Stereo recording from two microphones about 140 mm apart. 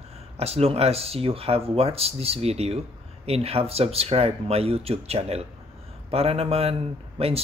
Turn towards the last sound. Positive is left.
turn(degrees=-45)  # may be behind; listen again after turning